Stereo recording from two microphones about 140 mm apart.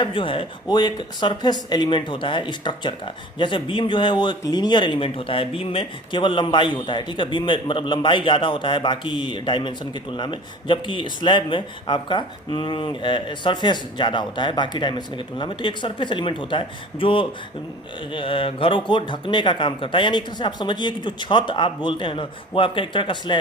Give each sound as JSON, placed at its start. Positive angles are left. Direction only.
{"t": 0.0, "sound": "speech", "side_deg": 35}